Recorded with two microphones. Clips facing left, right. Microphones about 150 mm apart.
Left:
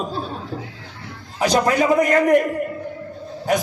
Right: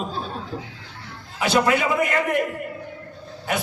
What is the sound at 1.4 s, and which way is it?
Speech, 40° left (ahead or behind).